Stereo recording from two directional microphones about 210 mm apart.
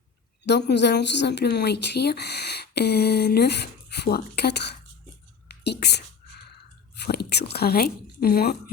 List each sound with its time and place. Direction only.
0.4 s speech: 55° left (ahead or behind)
7.0 s speech: 50° left (ahead or behind)